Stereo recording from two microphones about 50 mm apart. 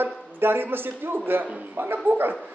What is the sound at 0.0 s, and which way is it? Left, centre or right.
A man's voice, right.